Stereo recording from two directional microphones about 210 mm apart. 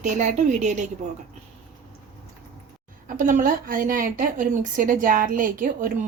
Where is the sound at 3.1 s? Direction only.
40° right (ahead or behind).